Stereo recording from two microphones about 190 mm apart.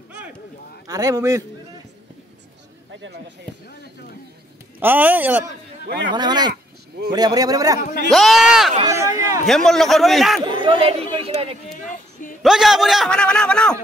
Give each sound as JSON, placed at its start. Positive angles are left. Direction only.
{"t": 0.8, "sound": "speech", "side_deg": -20}
{"t": 2.9, "sound": "a sound", "side_deg": -75}
{"t": 4.7, "sound": "speech", "side_deg": -10}
{"t": 6.1, "sound": "speech", "side_deg": -20}
{"t": 8.1, "sound": "a man's voice", "side_deg": 0}
{"t": 8.8, "sound": "speech", "side_deg": -15}
{"t": 9.5, "sound": "a man's voice", "side_deg": 0}
{"t": 10.4, "sound": "speech", "side_deg": -25}
{"t": 11.1, "sound": "a sound", "side_deg": -30}
{"t": 12.4, "sound": "a man's voice", "side_deg": 0}